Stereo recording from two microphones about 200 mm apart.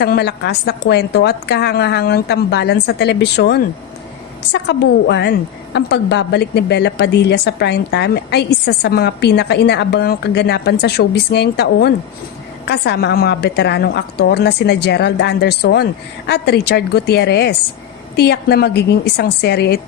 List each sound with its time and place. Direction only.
0.0 s a woman's voice: 55° left (ahead or behind)